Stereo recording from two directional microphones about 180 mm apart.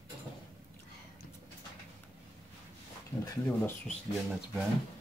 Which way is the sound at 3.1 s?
35° left (ahead or behind).